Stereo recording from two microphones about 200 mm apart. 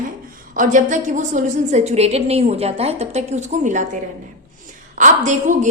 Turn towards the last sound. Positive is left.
turn(degrees=-35)  # may be behind; listen again after turning